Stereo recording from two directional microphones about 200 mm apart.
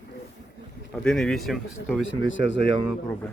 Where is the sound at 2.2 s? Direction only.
70° left (ahead or behind).